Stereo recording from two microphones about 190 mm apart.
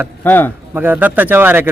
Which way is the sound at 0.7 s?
10° right (ahead or behind).